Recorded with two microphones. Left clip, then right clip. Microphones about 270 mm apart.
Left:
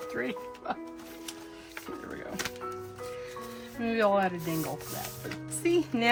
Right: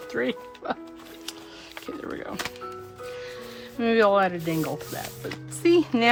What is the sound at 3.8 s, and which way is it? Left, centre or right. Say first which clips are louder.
Speech: right 6 dB; right.